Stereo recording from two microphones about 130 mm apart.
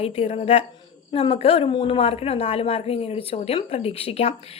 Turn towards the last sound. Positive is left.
turn(degrees=50)  # may be behind; listen again after turning